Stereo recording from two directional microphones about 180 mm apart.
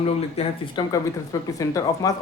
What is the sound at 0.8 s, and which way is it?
Speech, 25° left (ahead or behind).